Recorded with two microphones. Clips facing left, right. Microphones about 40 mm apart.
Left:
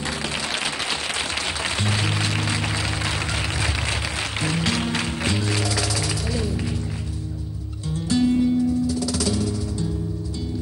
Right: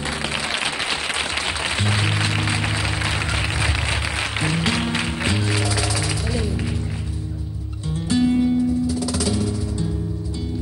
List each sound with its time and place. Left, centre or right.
0.0 s applause: centre
8.1 s music: centre